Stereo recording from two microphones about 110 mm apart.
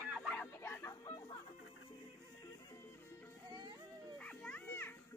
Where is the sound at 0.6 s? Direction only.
20° left (ahead or behind).